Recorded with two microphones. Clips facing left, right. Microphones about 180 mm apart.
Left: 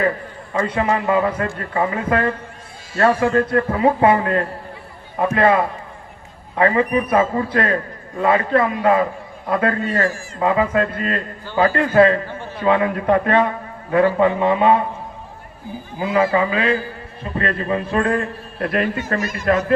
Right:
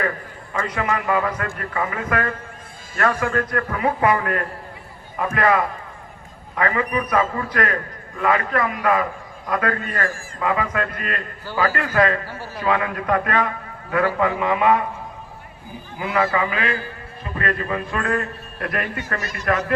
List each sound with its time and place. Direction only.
0.5 s a man's voice: 30° left (ahead or behind)
16.0 s a man's voice: 30° left (ahead or behind)